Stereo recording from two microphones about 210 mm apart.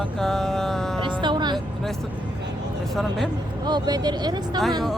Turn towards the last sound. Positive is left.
turn(degrees=-20)  # may be behind; listen again after turning